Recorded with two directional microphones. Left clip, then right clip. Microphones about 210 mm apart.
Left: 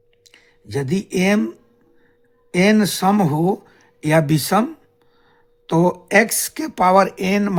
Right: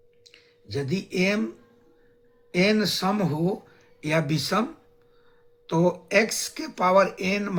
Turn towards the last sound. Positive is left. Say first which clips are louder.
# left 6 dB
turn(degrees=55)  # may be behind; listen again after turning